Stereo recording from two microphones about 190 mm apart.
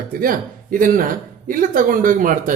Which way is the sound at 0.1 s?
50° right (ahead or behind).